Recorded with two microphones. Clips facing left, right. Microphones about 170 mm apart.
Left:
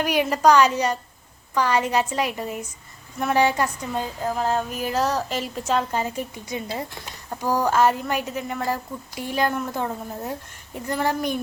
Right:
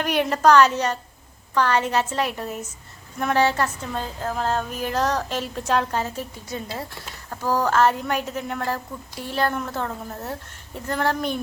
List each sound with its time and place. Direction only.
0.0 s speech: 10° left (ahead or behind)